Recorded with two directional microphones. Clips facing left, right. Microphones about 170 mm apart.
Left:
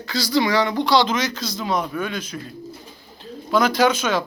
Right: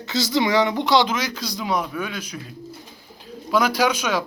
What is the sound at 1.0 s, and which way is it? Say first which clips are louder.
Speech: left 2 dB; 10° right (ahead or behind).